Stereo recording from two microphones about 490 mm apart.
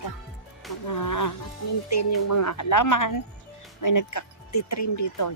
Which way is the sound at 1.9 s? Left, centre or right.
Left.